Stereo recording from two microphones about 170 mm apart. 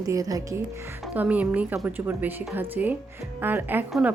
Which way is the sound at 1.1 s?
10° right (ahead or behind).